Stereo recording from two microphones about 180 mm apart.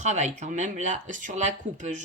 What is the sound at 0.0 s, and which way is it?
Speech, 40° right (ahead or behind).